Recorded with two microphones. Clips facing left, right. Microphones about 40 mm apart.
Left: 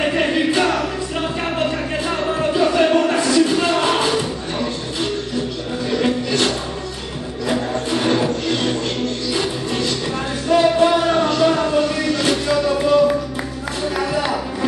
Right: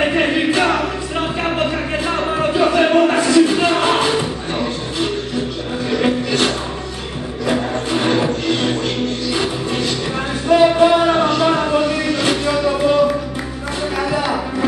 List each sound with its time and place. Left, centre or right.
0.0 s music: centre
10.5 s a sound: centre
13.9 s music: centre